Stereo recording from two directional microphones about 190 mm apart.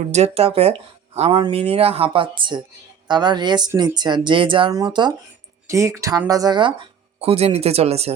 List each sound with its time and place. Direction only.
0.1 s speech: 35° right (ahead or behind)